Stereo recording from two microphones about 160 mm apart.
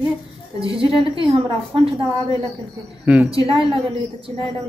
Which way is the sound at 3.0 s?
5° right (ahead or behind).